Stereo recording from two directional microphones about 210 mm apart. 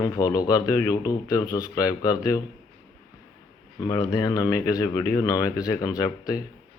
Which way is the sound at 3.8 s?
15° left (ahead or behind).